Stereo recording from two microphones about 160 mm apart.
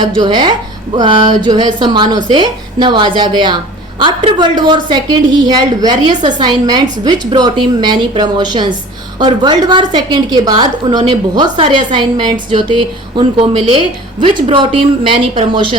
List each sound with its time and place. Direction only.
0.0 s a woman's voice: 30° right (ahead or behind)